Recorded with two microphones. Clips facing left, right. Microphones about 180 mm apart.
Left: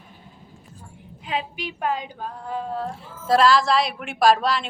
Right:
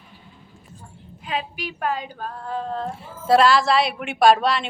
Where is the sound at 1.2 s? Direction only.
20° left (ahead or behind).